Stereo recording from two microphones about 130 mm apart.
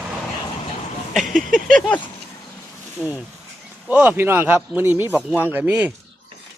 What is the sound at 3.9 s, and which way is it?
Speech, 15° right (ahead or behind).